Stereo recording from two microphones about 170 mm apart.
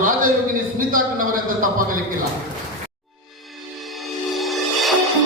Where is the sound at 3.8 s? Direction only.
Centre (ahead or behind).